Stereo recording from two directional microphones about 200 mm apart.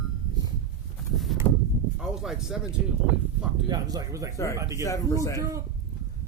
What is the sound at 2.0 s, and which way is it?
Speech, 5° right (ahead or behind).